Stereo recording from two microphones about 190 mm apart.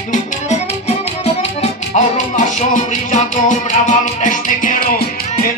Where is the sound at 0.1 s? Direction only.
35° left (ahead or behind).